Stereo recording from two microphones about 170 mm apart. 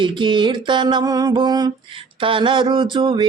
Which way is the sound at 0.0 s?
30° right (ahead or behind).